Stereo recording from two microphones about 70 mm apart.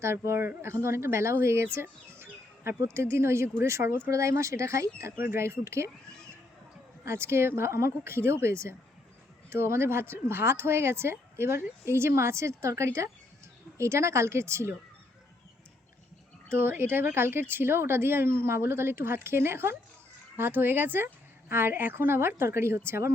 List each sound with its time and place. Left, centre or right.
0.0 s speech: right
7.0 s speech: right
16.5 s speech: right